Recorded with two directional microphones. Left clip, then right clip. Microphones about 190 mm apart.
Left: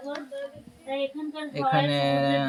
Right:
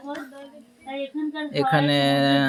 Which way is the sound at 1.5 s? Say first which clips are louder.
Right 3 dB; 30° right (ahead or behind).